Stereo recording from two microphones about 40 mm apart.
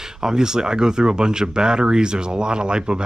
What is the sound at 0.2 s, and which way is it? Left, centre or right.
Speech, centre.